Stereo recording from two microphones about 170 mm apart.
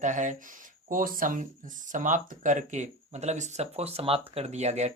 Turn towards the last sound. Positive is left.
turn(degrees=-40)  # may be behind; listen again after turning